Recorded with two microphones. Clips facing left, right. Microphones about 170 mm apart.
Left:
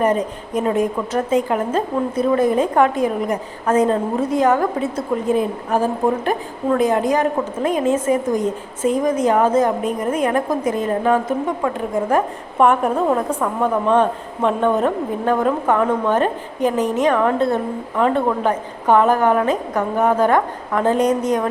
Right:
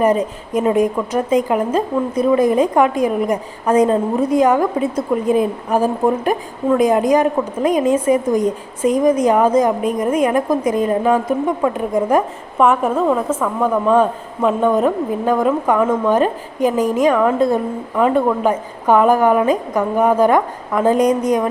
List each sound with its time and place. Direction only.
0.0 s a woman's voice: 10° right (ahead or behind)
12.5 s a woman's voice: centre (ahead or behind)